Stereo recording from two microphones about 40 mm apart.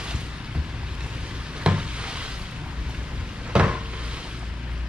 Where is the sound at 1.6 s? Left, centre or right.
Right.